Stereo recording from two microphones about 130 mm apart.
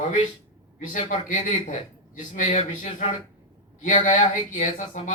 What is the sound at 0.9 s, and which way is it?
Speech, 90° left.